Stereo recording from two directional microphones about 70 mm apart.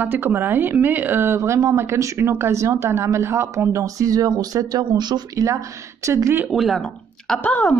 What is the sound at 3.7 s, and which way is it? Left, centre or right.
Speech, right.